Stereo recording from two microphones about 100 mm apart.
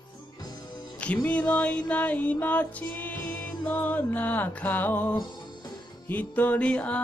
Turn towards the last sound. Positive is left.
turn(degrees=10)  # may be behind; listen again after turning